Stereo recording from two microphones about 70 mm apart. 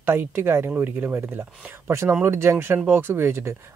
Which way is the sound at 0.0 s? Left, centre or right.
Right.